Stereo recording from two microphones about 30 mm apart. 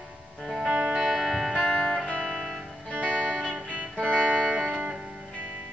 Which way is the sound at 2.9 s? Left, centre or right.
Right.